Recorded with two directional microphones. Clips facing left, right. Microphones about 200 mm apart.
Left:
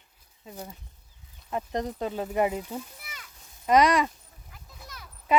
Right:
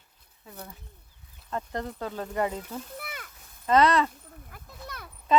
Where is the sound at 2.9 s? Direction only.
55° right (ahead or behind).